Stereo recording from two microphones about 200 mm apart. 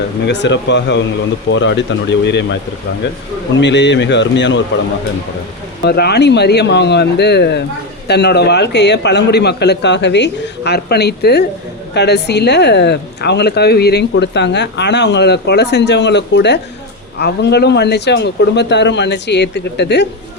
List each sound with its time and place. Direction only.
0.3 s a woman's voice: 60° left (ahead or behind)
3.6 s a woman's voice: 60° left (ahead or behind)
5.8 s a woman's voice: 55° left (ahead or behind)